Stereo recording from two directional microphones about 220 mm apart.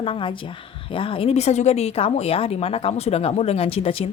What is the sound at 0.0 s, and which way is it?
Speech, 25° left (ahead or behind).